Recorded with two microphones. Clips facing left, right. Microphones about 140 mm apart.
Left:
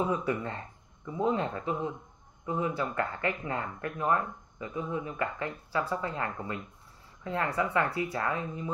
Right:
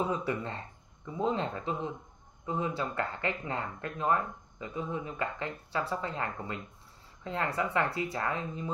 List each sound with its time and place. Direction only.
0.1 s speech: 30° right (ahead or behind)